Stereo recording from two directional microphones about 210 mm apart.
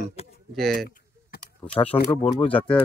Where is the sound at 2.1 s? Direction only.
15° left (ahead or behind).